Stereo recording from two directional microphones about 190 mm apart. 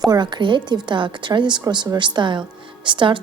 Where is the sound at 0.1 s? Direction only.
25° right (ahead or behind).